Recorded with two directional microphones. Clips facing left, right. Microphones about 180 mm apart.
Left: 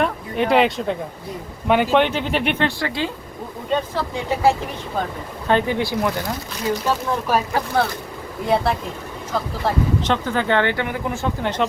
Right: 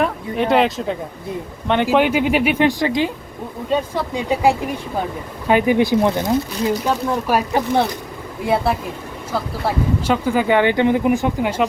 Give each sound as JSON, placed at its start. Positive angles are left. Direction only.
{"t": 0.0, "sound": "speech", "side_deg": 0}
{"t": 1.9, "sound": "speech", "side_deg": -10}
{"t": 8.4, "sound": "speech", "side_deg": -5}